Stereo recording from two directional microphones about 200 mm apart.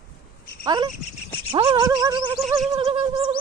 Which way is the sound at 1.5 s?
25° right (ahead or behind).